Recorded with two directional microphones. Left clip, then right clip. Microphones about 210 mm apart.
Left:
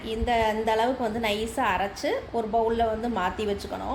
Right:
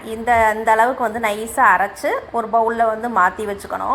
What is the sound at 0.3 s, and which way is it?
Speech, centre (ahead or behind).